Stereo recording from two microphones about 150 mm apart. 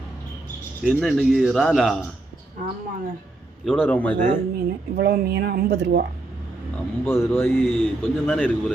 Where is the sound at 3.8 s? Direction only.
10° left (ahead or behind).